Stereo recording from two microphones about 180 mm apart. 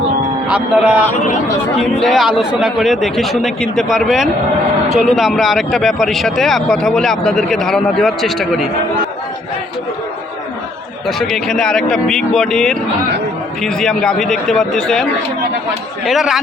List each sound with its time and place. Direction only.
0.4 s a man's voice: 5° right (ahead or behind)
11.0 s speech: centre (ahead or behind)
16.0 s speech: centre (ahead or behind)